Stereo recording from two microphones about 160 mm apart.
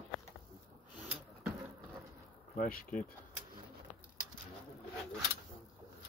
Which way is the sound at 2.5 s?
60° left (ahead or behind).